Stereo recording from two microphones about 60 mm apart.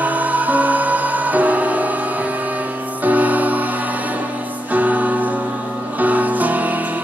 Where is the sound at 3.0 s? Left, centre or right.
Right.